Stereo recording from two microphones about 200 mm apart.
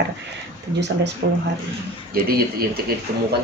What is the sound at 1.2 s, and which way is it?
Speech, 60° right (ahead or behind).